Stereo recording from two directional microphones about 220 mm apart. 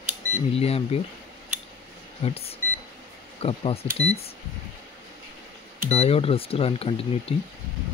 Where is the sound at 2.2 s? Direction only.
25° left (ahead or behind).